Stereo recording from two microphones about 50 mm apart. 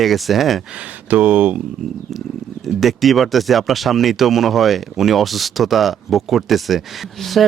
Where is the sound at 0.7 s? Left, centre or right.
Right.